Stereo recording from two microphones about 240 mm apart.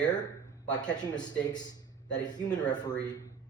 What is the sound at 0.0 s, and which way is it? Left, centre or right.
A man's voice, centre.